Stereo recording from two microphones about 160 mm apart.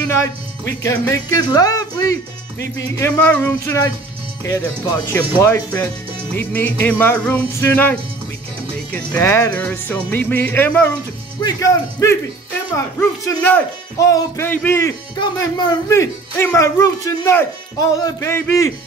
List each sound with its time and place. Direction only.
0.8 s speech: 20° left (ahead or behind)
3.0 s speech: 10° left (ahead or behind)
4.9 s speech: 15° left (ahead or behind)
15.1 s speech: 25° left (ahead or behind)